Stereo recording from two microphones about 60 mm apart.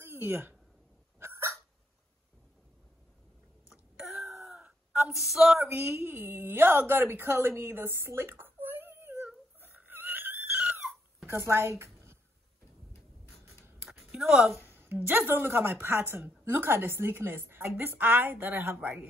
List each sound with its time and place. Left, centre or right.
0.0 s a sound: right
1.2 s dog: right
3.9 s a sound: centre
5.6 s a woman's voice: right
9.6 s a sound: right
11.2 s speech: right
14.2 s a woman's voice: centre
14.6 s a woman's voice: right
17.9 s a woman's voice: right
18.8 s speech: right